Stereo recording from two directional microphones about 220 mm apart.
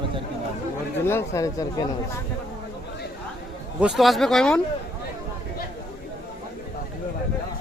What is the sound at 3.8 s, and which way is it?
Speech, centre (ahead or behind).